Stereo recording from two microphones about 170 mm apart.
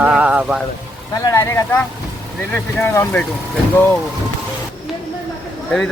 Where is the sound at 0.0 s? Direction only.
10° right (ahead or behind).